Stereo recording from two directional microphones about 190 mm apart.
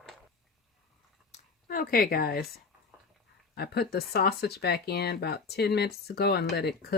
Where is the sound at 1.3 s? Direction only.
50° left (ahead or behind).